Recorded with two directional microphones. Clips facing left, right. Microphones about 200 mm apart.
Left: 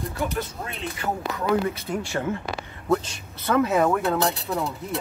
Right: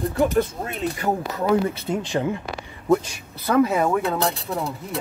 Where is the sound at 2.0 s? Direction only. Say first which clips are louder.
Right 3 dB; 15° right (ahead or behind).